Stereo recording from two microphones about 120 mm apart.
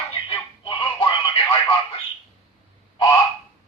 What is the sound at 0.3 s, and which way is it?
Music, 45° left (ahead or behind).